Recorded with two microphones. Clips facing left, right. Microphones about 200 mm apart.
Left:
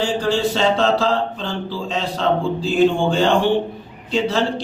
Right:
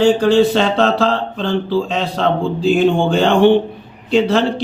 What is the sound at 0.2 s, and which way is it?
A man's voice, 60° right (ahead or behind).